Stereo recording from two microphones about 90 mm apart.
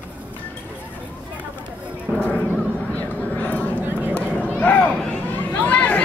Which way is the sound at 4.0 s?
20° left (ahead or behind).